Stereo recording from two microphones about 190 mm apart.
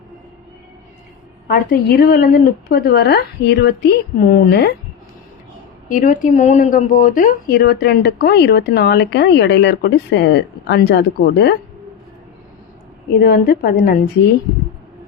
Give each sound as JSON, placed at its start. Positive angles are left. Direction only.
{"t": 1.5, "sound": "speech", "side_deg": 50}
{"t": 5.9, "sound": "speech", "side_deg": 45}
{"t": 13.1, "sound": "speech", "side_deg": 55}